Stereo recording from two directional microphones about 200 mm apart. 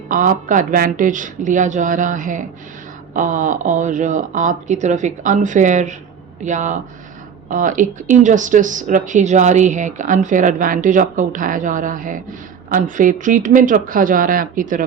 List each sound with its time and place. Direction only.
0.1 s speech: 40° right (ahead or behind)